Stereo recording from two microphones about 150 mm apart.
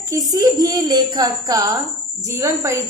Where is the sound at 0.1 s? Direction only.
25° right (ahead or behind).